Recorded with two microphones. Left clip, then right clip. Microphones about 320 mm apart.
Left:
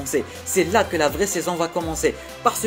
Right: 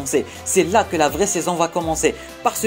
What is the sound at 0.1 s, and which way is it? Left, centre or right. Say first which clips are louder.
Speech: right 4 dB; centre.